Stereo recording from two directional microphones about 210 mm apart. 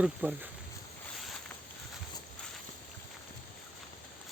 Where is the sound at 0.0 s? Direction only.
5° right (ahead or behind).